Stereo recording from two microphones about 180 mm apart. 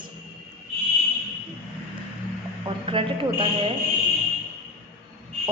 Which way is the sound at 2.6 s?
30° right (ahead or behind).